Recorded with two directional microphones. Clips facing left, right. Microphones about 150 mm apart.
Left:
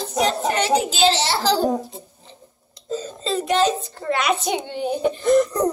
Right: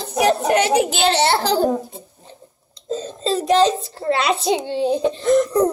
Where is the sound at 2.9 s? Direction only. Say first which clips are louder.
Right 3 dB; 35° right (ahead or behind).